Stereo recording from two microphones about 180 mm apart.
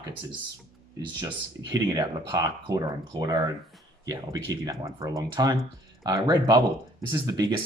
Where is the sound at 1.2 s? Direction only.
20° right (ahead or behind).